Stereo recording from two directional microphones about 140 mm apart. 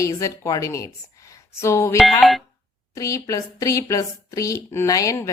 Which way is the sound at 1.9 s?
Centre (ahead or behind).